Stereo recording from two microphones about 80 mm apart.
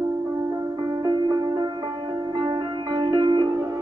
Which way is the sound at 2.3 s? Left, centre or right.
Right.